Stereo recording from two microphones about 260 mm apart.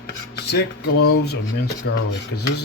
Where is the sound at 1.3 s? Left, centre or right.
Left.